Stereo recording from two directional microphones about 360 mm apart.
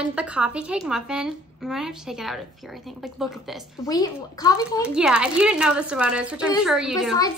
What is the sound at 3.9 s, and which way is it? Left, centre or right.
Speech, centre.